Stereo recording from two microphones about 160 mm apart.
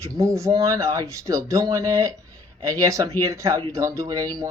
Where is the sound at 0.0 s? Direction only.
20° right (ahead or behind).